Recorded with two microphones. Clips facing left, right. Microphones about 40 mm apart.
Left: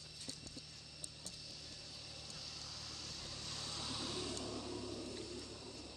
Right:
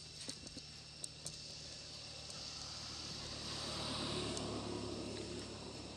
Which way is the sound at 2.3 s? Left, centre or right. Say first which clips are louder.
Right 1 dB; centre.